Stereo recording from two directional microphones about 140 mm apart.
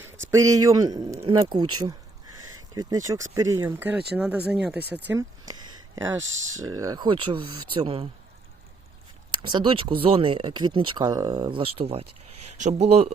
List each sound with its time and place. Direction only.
0.0 s speech: 20° right (ahead or behind)
5.0 s speech: 20° right (ahead or behind); by 8.0 s 40° right (ahead or behind)
9.4 s speech: 35° right (ahead or behind)
12.5 s speech: 55° right (ahead or behind)